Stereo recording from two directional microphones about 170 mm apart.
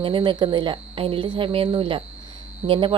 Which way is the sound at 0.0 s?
30° right (ahead or behind).